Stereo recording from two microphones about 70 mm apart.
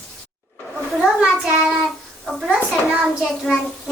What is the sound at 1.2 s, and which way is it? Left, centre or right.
A child's voice, centre.